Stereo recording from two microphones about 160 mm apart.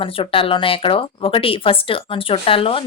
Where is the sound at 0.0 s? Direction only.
35° left (ahead or behind).